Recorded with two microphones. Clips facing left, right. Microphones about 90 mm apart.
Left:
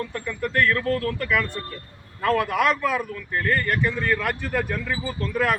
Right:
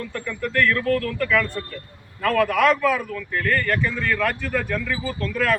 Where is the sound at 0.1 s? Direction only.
20° left (ahead or behind).